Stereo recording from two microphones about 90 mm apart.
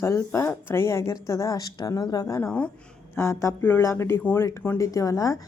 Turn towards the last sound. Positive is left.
turn(degrees=40)  # may be behind; listen again after turning